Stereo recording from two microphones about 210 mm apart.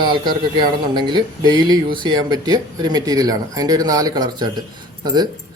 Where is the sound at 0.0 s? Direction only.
20° right (ahead or behind).